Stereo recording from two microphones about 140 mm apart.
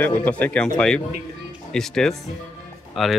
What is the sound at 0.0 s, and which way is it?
Speech, 10° left (ahead or behind).